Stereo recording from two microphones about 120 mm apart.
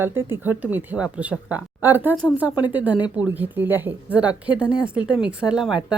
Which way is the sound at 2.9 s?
35° left (ahead or behind).